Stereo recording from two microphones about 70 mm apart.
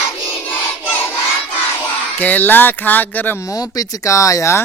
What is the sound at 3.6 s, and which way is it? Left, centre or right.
Speech, left.